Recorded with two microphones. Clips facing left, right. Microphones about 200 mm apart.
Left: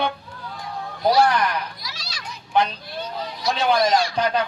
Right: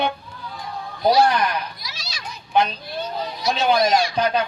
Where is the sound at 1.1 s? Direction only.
20° right (ahead or behind).